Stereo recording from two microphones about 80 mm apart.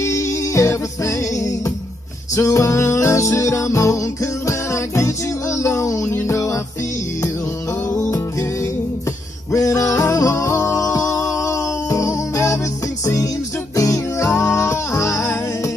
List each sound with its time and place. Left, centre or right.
0.0 s music: left
9.5 s music: left